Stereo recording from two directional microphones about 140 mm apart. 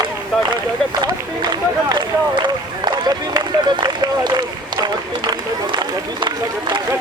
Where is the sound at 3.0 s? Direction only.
30° right (ahead or behind).